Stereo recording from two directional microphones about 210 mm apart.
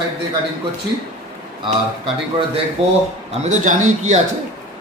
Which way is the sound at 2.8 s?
30° right (ahead or behind).